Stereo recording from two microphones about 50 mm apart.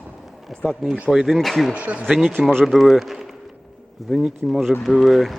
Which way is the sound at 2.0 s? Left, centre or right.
Centre.